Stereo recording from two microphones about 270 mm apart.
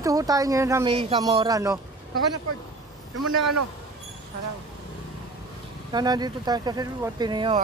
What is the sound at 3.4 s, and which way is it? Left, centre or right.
Speech, right.